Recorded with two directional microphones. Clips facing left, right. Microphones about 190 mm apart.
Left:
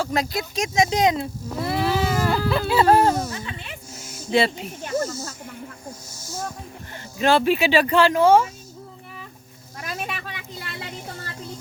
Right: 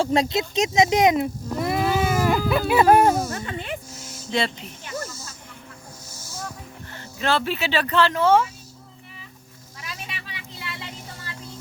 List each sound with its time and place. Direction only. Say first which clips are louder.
0.0 s speech: right 4 dB; 30° right (ahead or behind)
1.8 s a sound: even; 10° right (ahead or behind)
2.5 s speech: right 1 dB; 15° right (ahead or behind)
3.3 s a sound: right 4 dB; 50° right (ahead or behind)
4.3 s speech: left 5 dB; 5° left (ahead or behind)
4.8 s speech: left 8 dB; 45° left (ahead or behind)
7.2 s speech: left 5 dB; 15° left (ahead or behind)
9.7 s vehicle: left 7 dB; 50° left (ahead or behind)